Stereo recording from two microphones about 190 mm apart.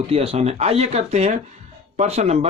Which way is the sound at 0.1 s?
30° right (ahead or behind).